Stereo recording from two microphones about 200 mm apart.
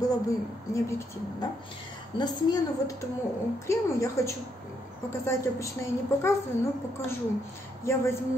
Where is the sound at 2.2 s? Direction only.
20° left (ahead or behind).